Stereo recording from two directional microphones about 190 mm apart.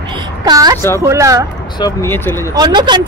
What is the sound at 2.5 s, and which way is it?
Speech, 25° right (ahead or behind).